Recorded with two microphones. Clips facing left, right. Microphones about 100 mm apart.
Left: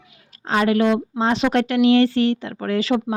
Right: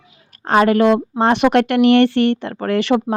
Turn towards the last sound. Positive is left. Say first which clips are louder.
# right 4 dB
turn(degrees=-65)  # may be behind; listen again after turning